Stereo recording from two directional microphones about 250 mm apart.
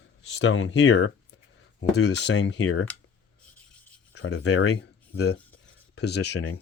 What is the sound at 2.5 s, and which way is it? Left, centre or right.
Speech, left.